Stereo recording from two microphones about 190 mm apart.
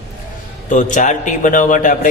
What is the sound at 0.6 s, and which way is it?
A man's voice, 40° left (ahead or behind).